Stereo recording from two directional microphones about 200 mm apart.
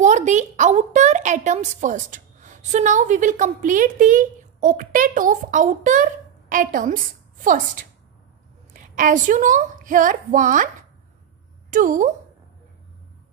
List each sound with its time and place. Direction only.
0.0 s a woman's voice: 35° right (ahead or behind)